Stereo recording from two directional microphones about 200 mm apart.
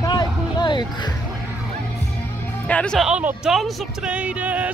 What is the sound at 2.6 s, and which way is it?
Speech, 5° left (ahead or behind).